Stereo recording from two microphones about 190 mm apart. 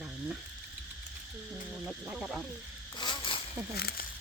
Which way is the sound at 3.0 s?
25° left (ahead or behind).